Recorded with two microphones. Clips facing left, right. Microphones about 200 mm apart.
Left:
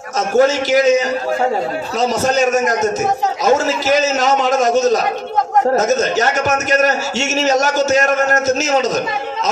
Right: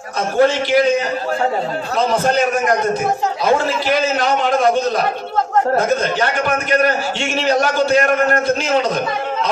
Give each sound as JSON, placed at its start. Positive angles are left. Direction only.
{"t": 0.4, "sound": "a man's voice", "side_deg": 45}